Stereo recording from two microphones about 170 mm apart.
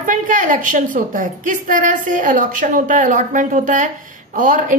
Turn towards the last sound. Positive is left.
turn(degrees=-50)  # may be behind; listen again after turning